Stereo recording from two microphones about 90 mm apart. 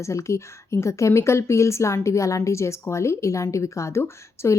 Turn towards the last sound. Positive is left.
turn(degrees=30)  # may be behind; listen again after turning